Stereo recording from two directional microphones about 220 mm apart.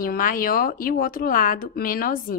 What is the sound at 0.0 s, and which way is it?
A woman's voice, 40° left (ahead or behind).